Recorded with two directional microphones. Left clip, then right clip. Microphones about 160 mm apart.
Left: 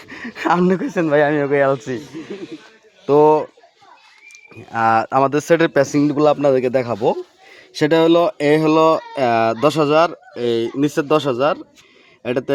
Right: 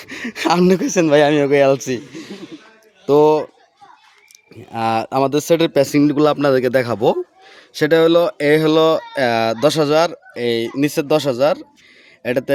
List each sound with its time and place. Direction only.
0.0 s a sound: 45° right (ahead or behind)
0.4 s a man's voice: 25° right (ahead or behind)
1.0 s a man's voice: 45° right (ahead or behind); by 2.4 s 25° right (ahead or behind)
3.1 s speech: 10° right (ahead or behind)
4.3 s a sound: 30° right (ahead or behind)
5.0 s a man's voice: 20° right (ahead or behind); by 7.2 s 40° right (ahead or behind)
7.8 s speech: 5° right (ahead or behind); by 11.2 s 25° right (ahead or behind)